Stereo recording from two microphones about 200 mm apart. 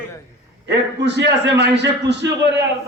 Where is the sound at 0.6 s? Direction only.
60° right (ahead or behind).